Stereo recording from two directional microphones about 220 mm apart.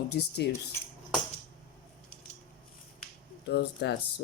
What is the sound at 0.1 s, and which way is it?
Speech, 50° left (ahead or behind).